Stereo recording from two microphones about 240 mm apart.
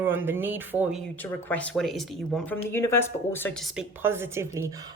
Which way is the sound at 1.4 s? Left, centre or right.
Centre.